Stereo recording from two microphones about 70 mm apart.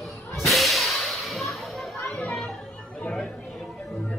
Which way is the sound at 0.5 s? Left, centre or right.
Centre.